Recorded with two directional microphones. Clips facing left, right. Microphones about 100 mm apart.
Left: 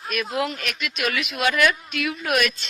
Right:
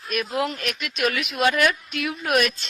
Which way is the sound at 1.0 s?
45° right (ahead or behind).